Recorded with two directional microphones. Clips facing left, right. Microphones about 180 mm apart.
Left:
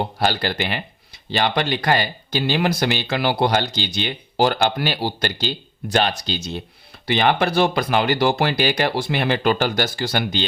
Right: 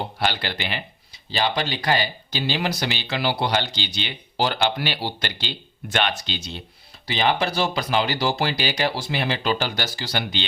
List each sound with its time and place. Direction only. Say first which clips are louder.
0.2 s speech: left 4 dB; 40° left (ahead or behind)
7.0 s speech: left 4 dB; 60° left (ahead or behind)